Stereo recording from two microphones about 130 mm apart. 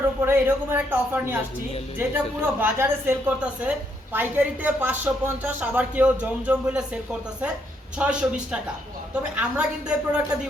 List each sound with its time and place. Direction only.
0.2 s speech: 15° right (ahead or behind)